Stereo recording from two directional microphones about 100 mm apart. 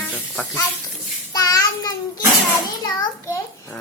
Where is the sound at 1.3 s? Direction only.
35° left (ahead or behind).